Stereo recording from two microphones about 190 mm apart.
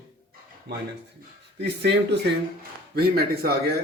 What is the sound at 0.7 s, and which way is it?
A man's voice, 60° right (ahead or behind).